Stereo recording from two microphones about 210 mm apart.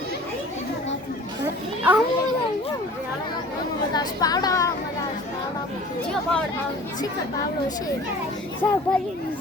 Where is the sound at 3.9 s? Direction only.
20° left (ahead or behind).